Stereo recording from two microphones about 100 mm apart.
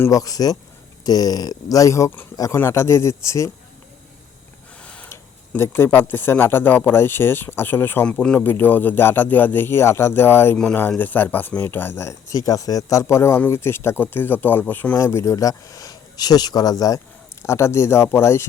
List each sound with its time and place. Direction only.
0.1 s speech: 35° left (ahead or behind)
4.8 s a sound: 10° left (ahead or behind)
5.0 s speech: 25° left (ahead or behind)
14.9 s speech: 30° left (ahead or behind)